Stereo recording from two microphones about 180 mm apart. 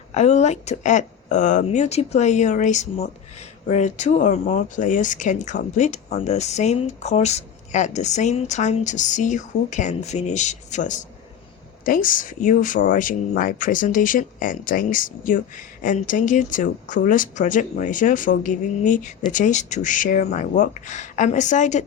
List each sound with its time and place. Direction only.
0.1 s speech: 40° left (ahead or behind)